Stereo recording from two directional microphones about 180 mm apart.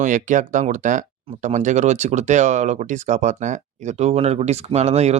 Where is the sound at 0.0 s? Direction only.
45° right (ahead or behind).